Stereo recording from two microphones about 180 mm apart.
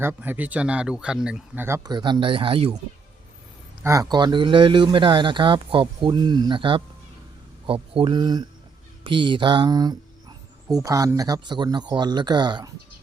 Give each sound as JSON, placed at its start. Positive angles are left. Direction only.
{"t": 0.0, "sound": "speech", "side_deg": -10}
{"t": 3.8, "sound": "speech", "side_deg": -20}